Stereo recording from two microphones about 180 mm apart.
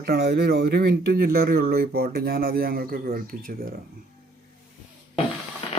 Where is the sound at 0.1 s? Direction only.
65° right (ahead or behind).